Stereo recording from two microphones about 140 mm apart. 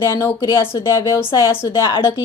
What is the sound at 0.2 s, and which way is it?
A woman's voice, 20° left (ahead or behind).